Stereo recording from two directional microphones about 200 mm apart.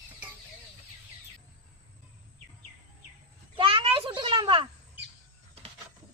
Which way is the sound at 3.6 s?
25° right (ahead or behind).